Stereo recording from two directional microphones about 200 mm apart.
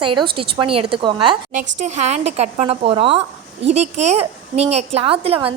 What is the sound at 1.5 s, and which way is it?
A woman's voice, 35° right (ahead or behind).